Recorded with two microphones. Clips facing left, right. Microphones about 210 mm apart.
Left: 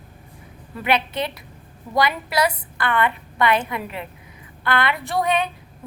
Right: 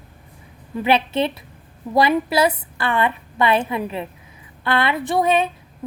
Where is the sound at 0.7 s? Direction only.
25° right (ahead or behind).